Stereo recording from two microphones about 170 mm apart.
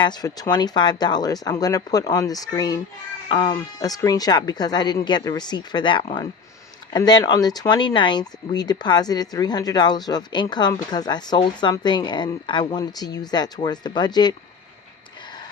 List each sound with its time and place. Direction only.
0.0 s speech: 25° left (ahead or behind)